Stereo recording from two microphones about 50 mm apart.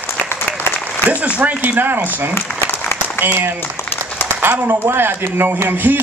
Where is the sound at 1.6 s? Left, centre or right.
Right.